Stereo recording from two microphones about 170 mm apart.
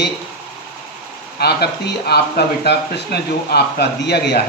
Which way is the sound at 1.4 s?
75° left (ahead or behind).